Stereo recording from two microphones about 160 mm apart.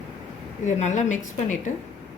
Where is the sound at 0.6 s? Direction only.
50° left (ahead or behind).